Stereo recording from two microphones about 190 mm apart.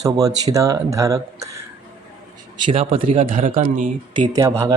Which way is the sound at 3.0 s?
45° right (ahead or behind).